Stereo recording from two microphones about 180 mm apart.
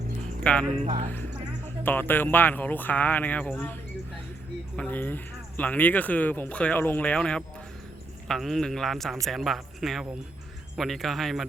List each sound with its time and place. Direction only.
0.4 s speech: 5° left (ahead or behind)
0.9 s speech: 40° right (ahead or behind)
1.8 s speech: 10° left (ahead or behind)
4.8 s a man's voice: 10° left (ahead or behind)